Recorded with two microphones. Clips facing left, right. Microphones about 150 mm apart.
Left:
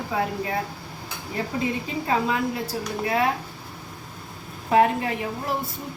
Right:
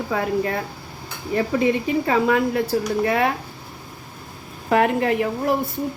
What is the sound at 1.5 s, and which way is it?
Speech, 70° right (ahead or behind).